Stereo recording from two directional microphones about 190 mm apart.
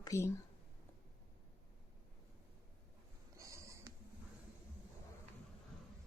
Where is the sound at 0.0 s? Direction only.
15° left (ahead or behind).